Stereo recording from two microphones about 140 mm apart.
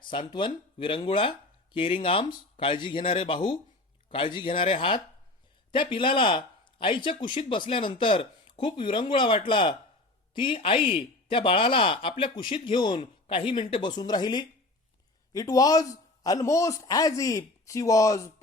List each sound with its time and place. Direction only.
0.0 s a man's voice: 35° left (ahead or behind)